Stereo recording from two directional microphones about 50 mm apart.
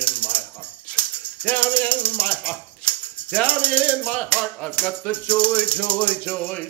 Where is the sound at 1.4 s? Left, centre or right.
Left.